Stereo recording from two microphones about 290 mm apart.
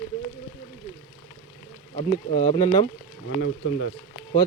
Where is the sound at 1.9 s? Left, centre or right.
Centre.